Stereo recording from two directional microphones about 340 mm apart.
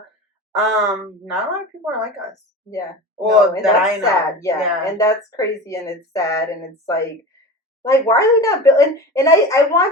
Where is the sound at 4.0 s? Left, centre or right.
Centre.